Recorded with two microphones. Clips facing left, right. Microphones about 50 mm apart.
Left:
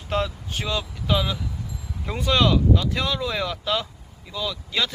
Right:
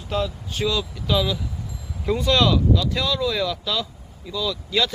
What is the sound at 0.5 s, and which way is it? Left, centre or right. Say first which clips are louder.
Speech: right 4 dB; left.